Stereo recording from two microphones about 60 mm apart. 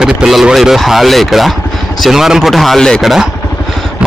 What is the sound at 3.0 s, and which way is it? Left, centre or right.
Speech, centre.